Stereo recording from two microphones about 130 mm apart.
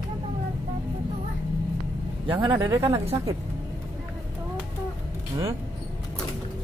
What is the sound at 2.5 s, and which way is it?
Speech, 25° right (ahead or behind).